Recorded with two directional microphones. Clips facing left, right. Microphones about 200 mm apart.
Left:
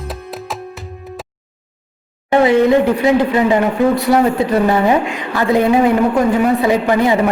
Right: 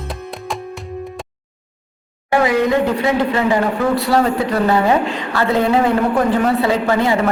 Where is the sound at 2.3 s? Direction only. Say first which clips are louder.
Left 4 dB; 25° left (ahead or behind).